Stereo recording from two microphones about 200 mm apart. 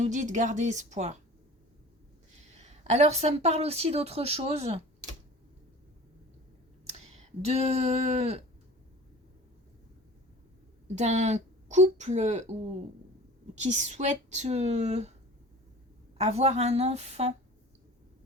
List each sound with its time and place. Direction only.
0.0 s speech: 35° right (ahead or behind)
2.4 s a woman's voice: 35° right (ahead or behind)
6.8 s speech: 30° right (ahead or behind)
10.9 s speech: 35° right (ahead or behind)
13.6 s speech: 35° right (ahead or behind)
16.1 s speech: 35° right (ahead or behind)